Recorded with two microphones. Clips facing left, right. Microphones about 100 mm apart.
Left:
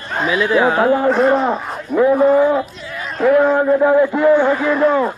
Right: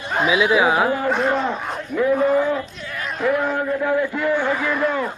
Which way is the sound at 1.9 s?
50° left (ahead or behind).